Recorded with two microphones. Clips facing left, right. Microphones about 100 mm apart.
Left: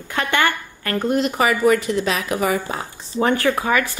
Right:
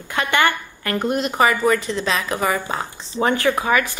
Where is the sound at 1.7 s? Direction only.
55° left (ahead or behind).